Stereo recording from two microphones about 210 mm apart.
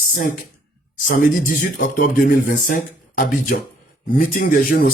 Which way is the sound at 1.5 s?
40° left (ahead or behind).